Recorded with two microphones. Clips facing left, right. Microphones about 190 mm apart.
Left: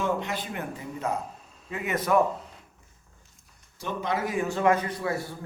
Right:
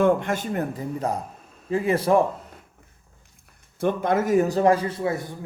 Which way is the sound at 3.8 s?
55° right (ahead or behind).